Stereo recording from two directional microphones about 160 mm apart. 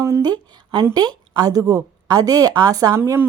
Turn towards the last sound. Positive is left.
turn(degrees=-15)  # may be behind; listen again after turning